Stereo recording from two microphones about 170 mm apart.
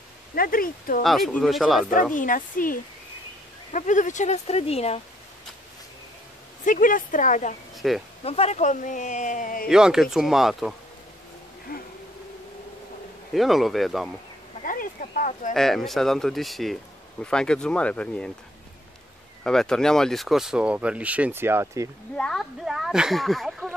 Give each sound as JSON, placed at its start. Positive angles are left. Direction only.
{"t": 0.3, "sound": "speech", "side_deg": 55}
{"t": 1.0, "sound": "speech", "side_deg": 0}
{"t": 2.1, "sound": "a man's voice", "side_deg": 55}
{"t": 6.6, "sound": "a man's voice", "side_deg": 50}
{"t": 7.7, "sound": "insect", "side_deg": 0}
{"t": 8.2, "sound": "a man's voice", "side_deg": 35}
{"t": 9.7, "sound": "speech", "side_deg": -5}
{"t": 11.7, "sound": "a sound", "side_deg": 60}
{"t": 13.3, "sound": "speech", "side_deg": 0}
{"t": 14.6, "sound": "speech", "side_deg": 55}
{"t": 15.5, "sound": "speech", "side_deg": 0}
{"t": 19.4, "sound": "speech", "side_deg": 5}
{"t": 22.1, "sound": "speech", "side_deg": 5}